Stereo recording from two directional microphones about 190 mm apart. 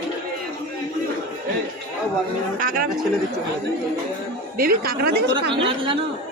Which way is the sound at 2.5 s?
45° right (ahead or behind).